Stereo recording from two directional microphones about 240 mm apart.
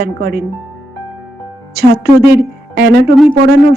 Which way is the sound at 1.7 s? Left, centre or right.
Right.